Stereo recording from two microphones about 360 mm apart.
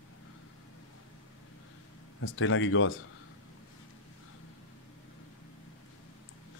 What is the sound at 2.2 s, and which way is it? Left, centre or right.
Speech, left.